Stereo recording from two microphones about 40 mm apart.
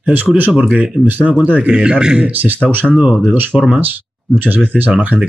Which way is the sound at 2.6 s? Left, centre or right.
Centre.